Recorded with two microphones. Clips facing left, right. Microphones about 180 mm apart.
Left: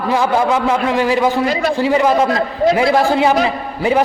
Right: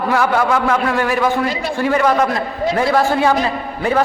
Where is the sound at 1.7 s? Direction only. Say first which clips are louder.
Even; 15° left (ahead or behind).